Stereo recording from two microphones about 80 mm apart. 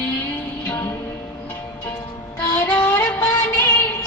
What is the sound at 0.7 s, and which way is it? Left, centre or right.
Music, left.